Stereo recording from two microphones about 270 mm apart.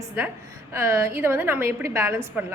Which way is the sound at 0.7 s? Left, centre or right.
Centre.